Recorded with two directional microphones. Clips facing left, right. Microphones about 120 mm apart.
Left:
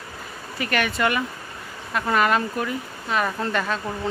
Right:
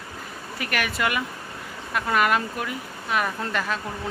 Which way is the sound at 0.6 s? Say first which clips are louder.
Left 4 dB; 5° right (ahead or behind).